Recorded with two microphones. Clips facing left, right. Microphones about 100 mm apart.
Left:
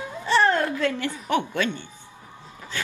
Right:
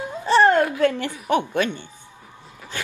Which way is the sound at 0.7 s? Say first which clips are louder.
Right 5 dB; 50° right (ahead or behind).